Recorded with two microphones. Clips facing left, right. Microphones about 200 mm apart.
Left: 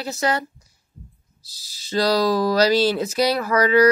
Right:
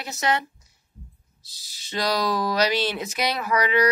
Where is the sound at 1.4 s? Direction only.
20° right (ahead or behind).